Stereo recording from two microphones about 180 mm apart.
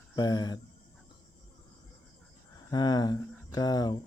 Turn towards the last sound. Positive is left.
turn(degrees=20)  # may be behind; listen again after turning